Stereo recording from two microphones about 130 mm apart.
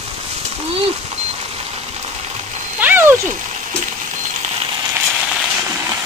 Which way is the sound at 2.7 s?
15° right (ahead or behind).